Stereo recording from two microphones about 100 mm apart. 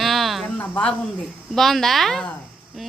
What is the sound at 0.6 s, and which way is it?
A woman's voice, 10° left (ahead or behind).